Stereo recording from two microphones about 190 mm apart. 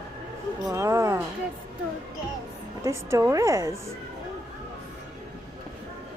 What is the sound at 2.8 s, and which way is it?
Speech, 15° right (ahead or behind).